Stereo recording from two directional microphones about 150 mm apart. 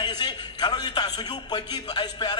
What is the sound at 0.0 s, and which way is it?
A man's voice, 30° left (ahead or behind).